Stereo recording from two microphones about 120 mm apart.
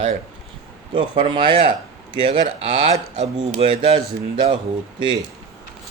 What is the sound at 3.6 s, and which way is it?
Speech, 50° right (ahead or behind).